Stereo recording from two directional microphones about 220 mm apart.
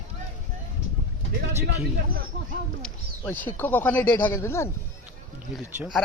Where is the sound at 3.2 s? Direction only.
10° left (ahead or behind).